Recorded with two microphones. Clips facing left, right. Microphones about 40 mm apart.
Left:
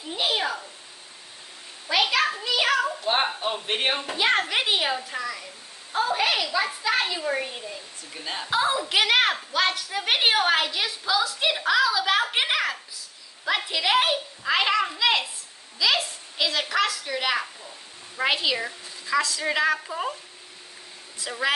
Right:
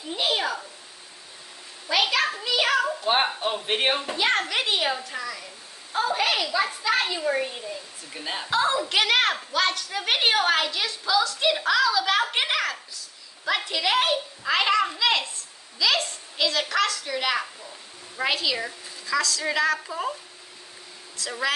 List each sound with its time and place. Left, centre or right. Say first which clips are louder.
0.1 s a sound: even; centre
1.9 s a child's voice: left 1 dB; centre
4.1 s a woman's voice: left 1 dB; centre
8.1 s a woman's voice: right 1 dB; centre
8.5 s a woman's voice: even; centre
18.2 s a woman's voice: left 1 dB; centre
21.2 s a woman's voice: even; left